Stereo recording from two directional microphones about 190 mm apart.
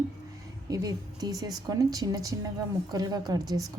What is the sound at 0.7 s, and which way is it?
A woman's voice, 20° right (ahead or behind).